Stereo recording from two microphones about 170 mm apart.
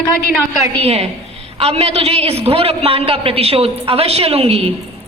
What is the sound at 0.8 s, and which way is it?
A man's voice, 35° right (ahead or behind).